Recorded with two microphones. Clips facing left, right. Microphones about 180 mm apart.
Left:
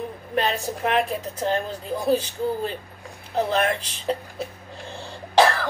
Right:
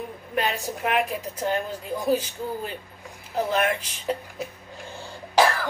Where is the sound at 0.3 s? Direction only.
35° left (ahead or behind).